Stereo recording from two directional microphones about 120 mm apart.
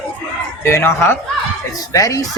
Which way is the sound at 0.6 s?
20° left (ahead or behind).